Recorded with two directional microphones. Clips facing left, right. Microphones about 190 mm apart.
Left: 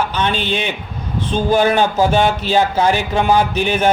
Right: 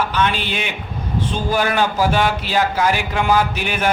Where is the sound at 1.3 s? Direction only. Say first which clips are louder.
Left 6 dB; 25° left (ahead or behind).